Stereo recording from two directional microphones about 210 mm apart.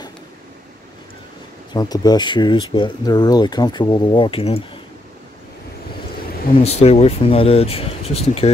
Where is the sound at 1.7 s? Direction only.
20° left (ahead or behind).